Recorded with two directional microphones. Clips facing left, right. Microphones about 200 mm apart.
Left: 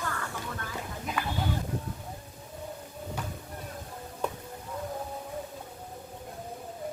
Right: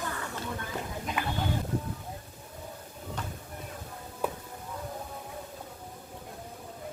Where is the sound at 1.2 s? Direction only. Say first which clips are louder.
Even; 20° right (ahead or behind).